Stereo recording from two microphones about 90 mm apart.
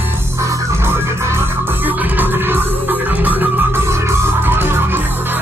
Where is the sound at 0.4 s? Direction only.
30° right (ahead or behind).